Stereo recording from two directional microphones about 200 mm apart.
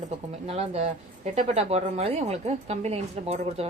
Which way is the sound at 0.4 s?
30° right (ahead or behind).